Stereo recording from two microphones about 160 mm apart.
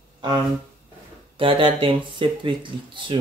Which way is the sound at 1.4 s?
35° right (ahead or behind).